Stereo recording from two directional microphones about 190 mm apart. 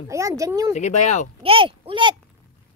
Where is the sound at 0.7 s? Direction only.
40° left (ahead or behind).